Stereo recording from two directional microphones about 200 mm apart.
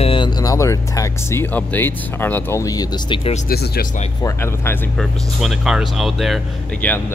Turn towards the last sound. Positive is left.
turn(degrees=10)  # may be behind; listen again after turning